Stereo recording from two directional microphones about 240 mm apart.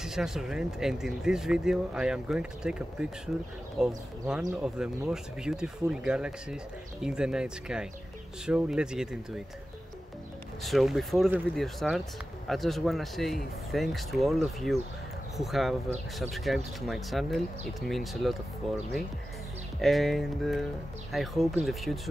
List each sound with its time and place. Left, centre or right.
0.0 s speech: centre
10.6 s speech: centre